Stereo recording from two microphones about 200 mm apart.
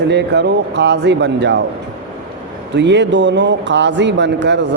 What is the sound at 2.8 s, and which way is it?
Speech, 60° right (ahead or behind).